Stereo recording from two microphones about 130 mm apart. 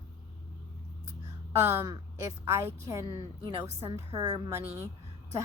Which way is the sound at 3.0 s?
35° right (ahead or behind).